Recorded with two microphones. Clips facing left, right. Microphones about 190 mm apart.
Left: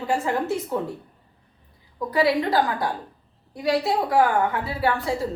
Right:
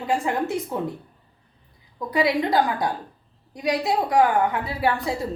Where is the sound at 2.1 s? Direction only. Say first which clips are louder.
Even; 15° right (ahead or behind).